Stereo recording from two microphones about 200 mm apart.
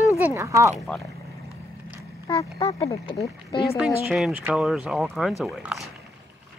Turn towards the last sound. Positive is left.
turn(degrees=0)  # may be behind; listen again after turning